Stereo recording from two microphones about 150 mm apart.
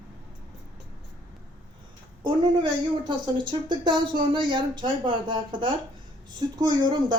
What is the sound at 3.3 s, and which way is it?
Speech, 30° right (ahead or behind).